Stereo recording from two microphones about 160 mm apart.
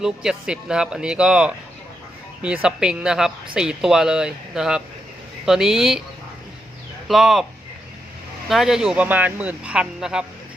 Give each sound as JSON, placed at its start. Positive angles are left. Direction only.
{"t": 0.0, "sound": "speech", "side_deg": -5}
{"t": 7.1, "sound": "speech", "side_deg": 0}
{"t": 8.4, "sound": "speech", "side_deg": 0}